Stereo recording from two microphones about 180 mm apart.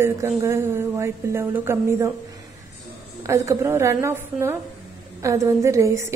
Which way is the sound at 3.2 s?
15° right (ahead or behind).